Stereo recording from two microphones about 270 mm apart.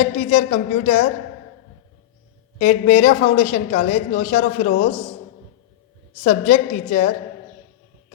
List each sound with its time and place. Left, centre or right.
0.0 s a woman's voice: left
2.6 s a woman's voice: left
6.2 s a woman's voice: left